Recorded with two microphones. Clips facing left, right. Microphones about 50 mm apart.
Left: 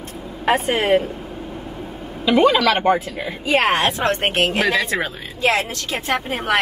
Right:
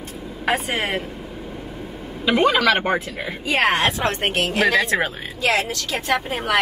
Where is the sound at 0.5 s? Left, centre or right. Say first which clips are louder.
Left 5 dB; left.